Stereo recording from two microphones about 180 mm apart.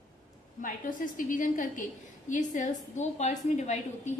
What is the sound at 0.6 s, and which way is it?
A woman's voice, 50° left (ahead or behind).